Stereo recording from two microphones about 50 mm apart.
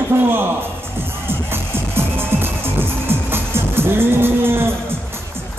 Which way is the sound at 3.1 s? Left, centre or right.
Right.